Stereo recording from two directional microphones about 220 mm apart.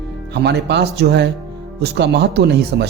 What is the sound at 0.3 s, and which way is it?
A man's voice, 50° right (ahead or behind).